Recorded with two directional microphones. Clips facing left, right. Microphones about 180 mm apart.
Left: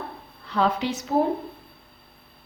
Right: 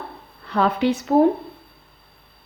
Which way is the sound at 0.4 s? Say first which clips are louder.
Right 4 dB; 60° right (ahead or behind).